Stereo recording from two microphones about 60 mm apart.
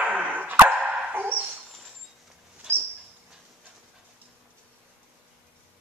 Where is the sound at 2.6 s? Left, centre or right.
Centre.